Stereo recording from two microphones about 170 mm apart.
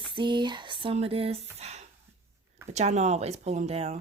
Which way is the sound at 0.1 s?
30° right (ahead or behind).